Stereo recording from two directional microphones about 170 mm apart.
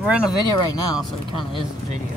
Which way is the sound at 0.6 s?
25° left (ahead or behind).